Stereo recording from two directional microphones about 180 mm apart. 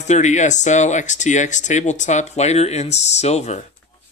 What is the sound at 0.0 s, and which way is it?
Speech, 40° left (ahead or behind).